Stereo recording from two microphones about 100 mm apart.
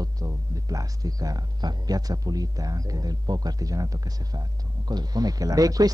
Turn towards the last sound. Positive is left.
turn(degrees=-35)  # may be behind; listen again after turning